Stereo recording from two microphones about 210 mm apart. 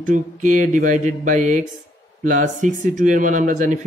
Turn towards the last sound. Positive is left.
turn(degrees=-35)  # may be behind; listen again after turning